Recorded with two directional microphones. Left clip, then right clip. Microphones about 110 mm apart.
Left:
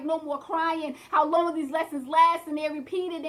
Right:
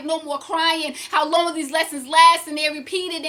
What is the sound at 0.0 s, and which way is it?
Speech, 20° right (ahead or behind).